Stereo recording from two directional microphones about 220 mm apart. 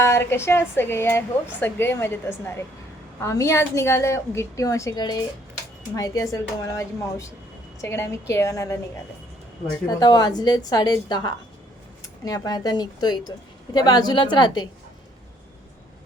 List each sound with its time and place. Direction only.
0.0 s a woman's voice: 10° left (ahead or behind)
10.0 s a woman's voice: 20° left (ahead or behind)